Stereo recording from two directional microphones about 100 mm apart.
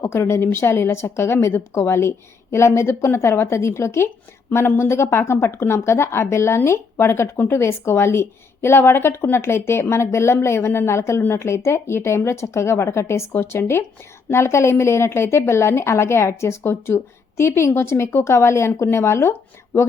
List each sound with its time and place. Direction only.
0.0 s speech: 25° left (ahead or behind)